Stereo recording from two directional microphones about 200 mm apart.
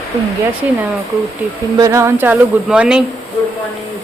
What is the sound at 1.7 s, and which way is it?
Speech, 15° right (ahead or behind).